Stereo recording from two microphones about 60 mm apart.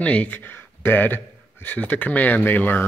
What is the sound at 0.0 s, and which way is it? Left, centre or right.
Speech, left.